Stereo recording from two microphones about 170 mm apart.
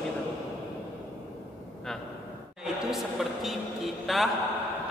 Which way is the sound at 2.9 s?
Centre (ahead or behind).